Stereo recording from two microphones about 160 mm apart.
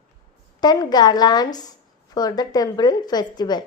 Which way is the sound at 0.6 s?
25° left (ahead or behind).